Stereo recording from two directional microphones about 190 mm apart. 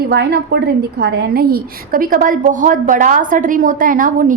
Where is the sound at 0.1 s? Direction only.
60° right (ahead or behind).